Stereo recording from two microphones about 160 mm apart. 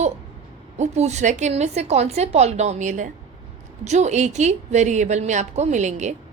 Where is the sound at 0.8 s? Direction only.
45° right (ahead or behind).